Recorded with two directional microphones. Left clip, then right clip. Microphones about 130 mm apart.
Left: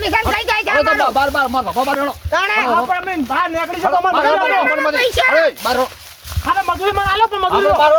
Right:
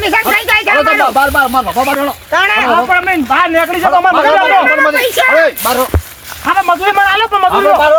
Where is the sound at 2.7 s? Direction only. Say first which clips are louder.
Right 7 dB; 90° left.